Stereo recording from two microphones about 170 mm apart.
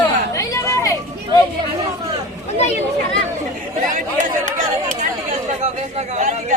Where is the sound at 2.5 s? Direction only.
40° left (ahead or behind).